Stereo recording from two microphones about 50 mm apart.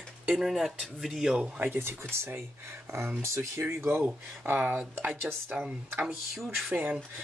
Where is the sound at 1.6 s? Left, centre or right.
Right.